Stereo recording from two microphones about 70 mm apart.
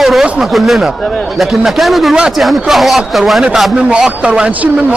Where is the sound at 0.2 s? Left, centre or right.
Centre.